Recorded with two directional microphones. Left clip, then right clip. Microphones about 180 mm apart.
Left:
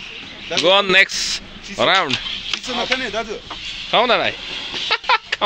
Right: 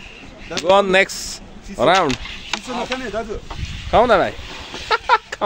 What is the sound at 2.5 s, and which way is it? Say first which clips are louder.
Speech: left 2 dB; 45° right (ahead or behind).